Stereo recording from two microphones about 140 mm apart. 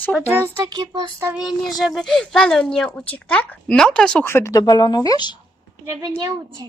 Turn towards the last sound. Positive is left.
turn(degrees=-25)  # may be behind; listen again after turning